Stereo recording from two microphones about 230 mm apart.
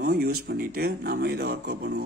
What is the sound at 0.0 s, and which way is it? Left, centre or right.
Speech, right.